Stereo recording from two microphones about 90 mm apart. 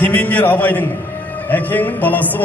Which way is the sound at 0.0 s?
20° left (ahead or behind).